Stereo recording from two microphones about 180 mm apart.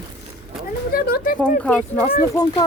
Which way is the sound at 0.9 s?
55° left (ahead or behind).